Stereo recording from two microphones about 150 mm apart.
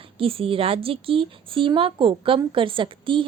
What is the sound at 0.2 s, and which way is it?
A woman's voice, 40° right (ahead or behind).